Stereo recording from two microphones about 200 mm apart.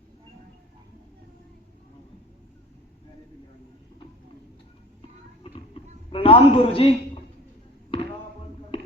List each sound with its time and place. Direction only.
6.1 s a man's voice: 25° left (ahead or behind)
7.9 s basketball bounce: 25° left (ahead or behind)